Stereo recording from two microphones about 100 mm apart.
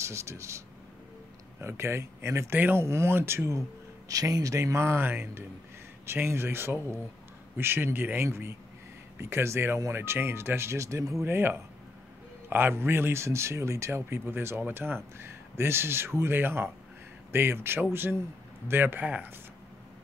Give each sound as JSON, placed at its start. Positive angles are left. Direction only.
{"t": 0.0, "sound": "speech", "side_deg": -30}